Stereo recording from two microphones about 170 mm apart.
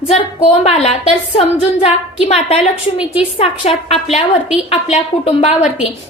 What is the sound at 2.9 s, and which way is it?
Speech, 5° right (ahead or behind).